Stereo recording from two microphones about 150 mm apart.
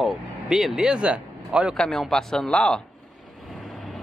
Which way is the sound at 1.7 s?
Centre (ahead or behind).